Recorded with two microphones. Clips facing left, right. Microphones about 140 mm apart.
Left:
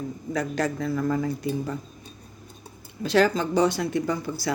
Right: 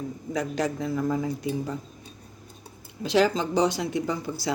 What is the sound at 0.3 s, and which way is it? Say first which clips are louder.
Speech: left 1 dB; 15° right (ahead or behind).